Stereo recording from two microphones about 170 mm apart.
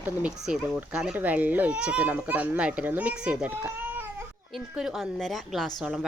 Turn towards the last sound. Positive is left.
turn(degrees=-5)  # may be behind; listen again after turning